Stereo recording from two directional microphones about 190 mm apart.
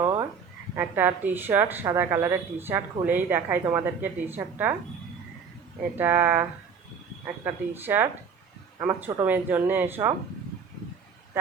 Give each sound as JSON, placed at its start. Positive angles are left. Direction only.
{"t": 0.0, "sound": "frog", "side_deg": -20}
{"t": 0.8, "sound": "a woman's voice", "side_deg": -10}
{"t": 6.0, "sound": "a woman's voice", "side_deg": -10}